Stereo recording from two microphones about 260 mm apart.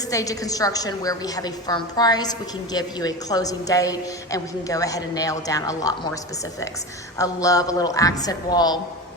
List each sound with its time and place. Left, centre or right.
0.1 s a woman's voice: centre
7.2 s a woman's voice: centre